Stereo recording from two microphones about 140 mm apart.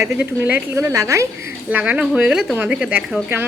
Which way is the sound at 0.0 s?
15° right (ahead or behind).